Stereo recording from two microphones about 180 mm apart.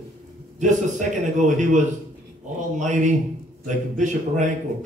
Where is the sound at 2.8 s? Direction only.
40° right (ahead or behind).